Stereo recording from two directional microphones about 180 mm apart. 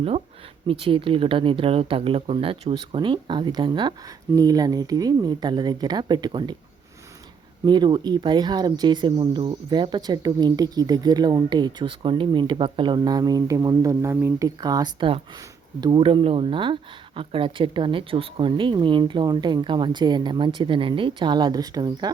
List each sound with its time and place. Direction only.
0.7 s speech: 30° right (ahead or behind)
7.6 s speech: 25° right (ahead or behind)